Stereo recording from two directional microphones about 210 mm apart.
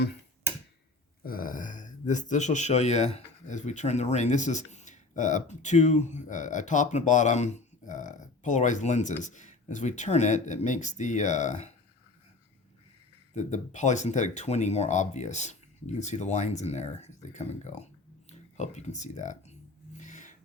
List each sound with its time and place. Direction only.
1.2 s speech: 45° left (ahead or behind)
13.3 s speech: 35° left (ahead or behind)
20.0 s a sound: 35° left (ahead or behind)